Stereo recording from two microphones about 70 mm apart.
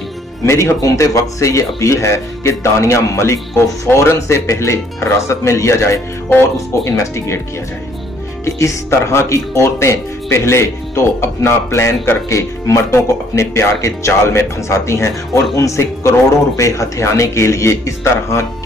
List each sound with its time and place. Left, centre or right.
0.5 s speech: left
0.8 s speech: left
8.5 s speech: left